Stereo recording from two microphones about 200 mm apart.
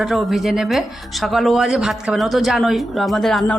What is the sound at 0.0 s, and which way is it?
Speech, centre (ahead or behind).